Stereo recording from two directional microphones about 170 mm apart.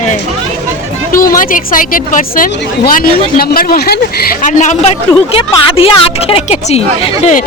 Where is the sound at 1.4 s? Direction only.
55° left (ahead or behind).